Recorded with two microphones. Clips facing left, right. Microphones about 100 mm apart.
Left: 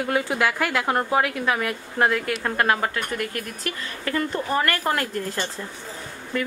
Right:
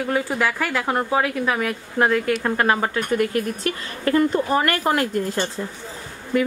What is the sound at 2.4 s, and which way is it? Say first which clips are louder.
Speech: right 2 dB; 20° right (ahead or behind).